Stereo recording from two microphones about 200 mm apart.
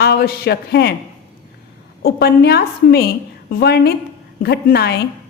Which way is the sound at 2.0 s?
55° left (ahead or behind).